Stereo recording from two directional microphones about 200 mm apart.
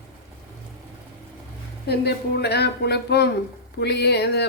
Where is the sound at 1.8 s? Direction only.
55° left (ahead or behind).